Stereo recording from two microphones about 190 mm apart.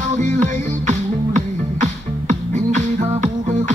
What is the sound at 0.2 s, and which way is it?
Music, 40° right (ahead or behind).